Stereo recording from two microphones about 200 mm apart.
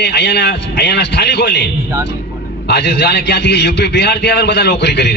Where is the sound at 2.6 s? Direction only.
55° left (ahead or behind).